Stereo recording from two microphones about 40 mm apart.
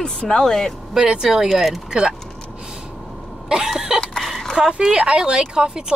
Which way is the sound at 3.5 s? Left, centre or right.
Centre.